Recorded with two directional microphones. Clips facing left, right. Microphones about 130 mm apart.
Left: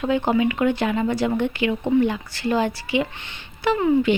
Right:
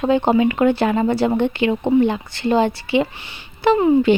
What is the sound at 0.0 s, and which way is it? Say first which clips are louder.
Speech: right 4 dB; 30° right (ahead or behind).